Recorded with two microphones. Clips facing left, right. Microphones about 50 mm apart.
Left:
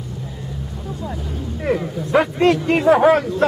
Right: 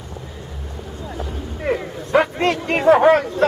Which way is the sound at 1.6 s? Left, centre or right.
Centre.